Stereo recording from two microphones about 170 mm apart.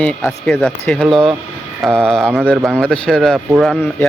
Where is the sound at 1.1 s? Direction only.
30° right (ahead or behind).